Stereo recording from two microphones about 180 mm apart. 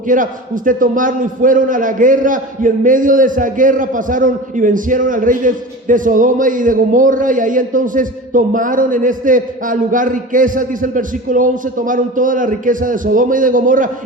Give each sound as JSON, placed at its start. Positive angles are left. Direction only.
{"t": 0.1, "sound": "a man's voice", "side_deg": -45}